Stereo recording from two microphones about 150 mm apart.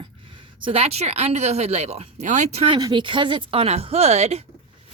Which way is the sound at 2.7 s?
30° right (ahead or behind).